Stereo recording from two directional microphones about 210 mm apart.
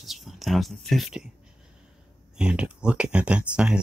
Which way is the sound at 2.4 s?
5° right (ahead or behind).